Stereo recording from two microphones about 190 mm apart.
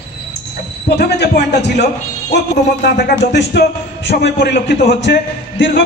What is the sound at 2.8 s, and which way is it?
A man's voice, 65° left (ahead or behind).